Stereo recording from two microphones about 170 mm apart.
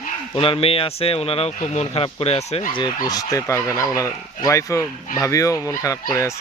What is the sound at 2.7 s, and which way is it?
Speech, 25° left (ahead or behind).